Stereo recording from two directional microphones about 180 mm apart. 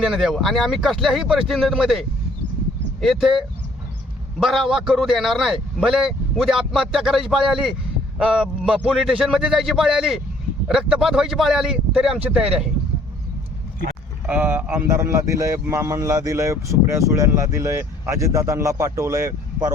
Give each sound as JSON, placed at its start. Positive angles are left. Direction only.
{"t": 0.0, "sound": "a man's voice", "side_deg": 0}
{"t": 14.3, "sound": "speech", "side_deg": -10}